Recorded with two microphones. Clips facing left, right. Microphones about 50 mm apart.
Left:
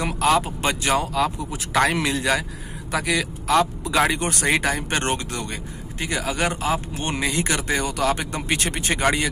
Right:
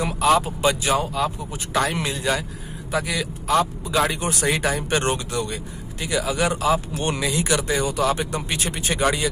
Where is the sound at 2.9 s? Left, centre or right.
Left.